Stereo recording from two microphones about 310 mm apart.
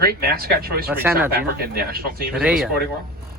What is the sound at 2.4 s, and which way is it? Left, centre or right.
Speech, centre.